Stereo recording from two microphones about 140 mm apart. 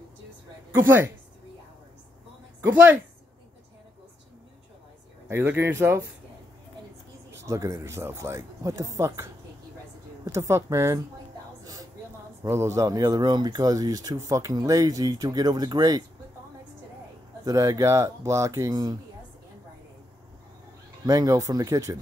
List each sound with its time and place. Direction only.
0.7 s a woman's voice: 15° right (ahead or behind)
2.6 s a woman's voice: 15° right (ahead or behind)
5.3 s speech: 20° right (ahead or behind)
7.3 s speech: 20° right (ahead or behind)
12.4 s speech: 20° right (ahead or behind)
17.5 s speech: 25° right (ahead or behind)
21.0 s speech: 25° right (ahead or behind)